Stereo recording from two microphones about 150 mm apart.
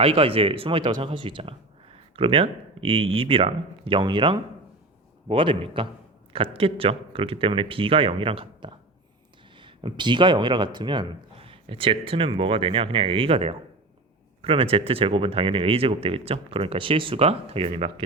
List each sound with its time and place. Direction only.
0.0 s speech: 40° right (ahead or behind)